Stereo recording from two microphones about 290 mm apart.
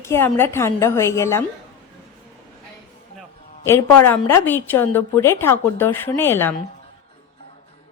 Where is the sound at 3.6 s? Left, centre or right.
Centre.